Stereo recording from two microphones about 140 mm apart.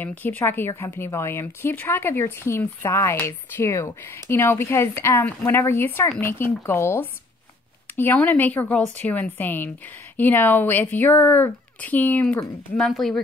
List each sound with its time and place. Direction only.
0.0 s a woman's voice: 15° left (ahead or behind)